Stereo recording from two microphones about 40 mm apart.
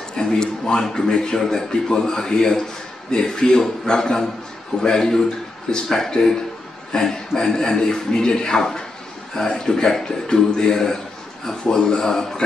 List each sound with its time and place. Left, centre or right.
0.1 s a man's voice: centre